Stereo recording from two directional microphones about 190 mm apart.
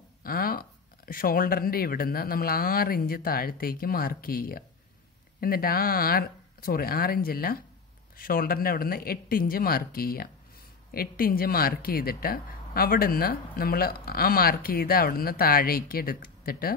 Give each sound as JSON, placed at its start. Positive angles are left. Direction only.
{"t": 0.2, "sound": "speech", "side_deg": 50}